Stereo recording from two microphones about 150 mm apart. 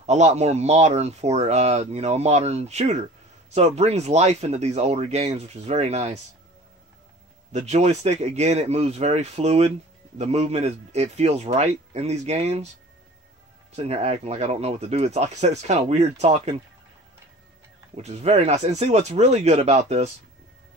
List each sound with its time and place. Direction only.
0.0 s speech: 50° right (ahead or behind)
7.5 s speech: 50° right (ahead or behind)
13.7 s speech: 45° right (ahead or behind)
17.9 s speech: 45° right (ahead or behind)